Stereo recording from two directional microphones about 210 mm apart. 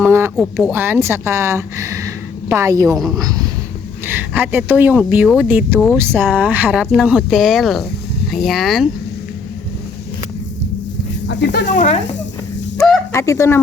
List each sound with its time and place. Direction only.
0.0 s speech: 10° right (ahead or behind)
0.3 s speech: centre (ahead or behind)
0.7 s speech: 10° right (ahead or behind)
11.3 s speech: 55° left (ahead or behind)
11.6 s speech: 35° left (ahead or behind)
13.1 s speech: 15° left (ahead or behind)